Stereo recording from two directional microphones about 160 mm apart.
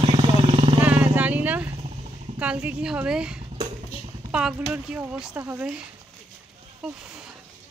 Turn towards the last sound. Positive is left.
turn(degrees=-10)  # may be behind; listen again after turning